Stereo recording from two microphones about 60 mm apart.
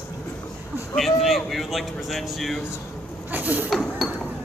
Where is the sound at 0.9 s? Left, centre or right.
Centre.